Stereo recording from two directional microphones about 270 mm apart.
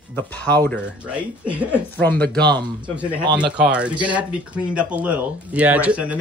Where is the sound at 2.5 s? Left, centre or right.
Centre.